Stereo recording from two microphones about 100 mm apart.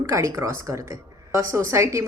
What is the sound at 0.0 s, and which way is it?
A woman's voice, 30° right (ahead or behind).